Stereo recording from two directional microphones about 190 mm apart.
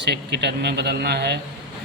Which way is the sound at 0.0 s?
60° right (ahead or behind).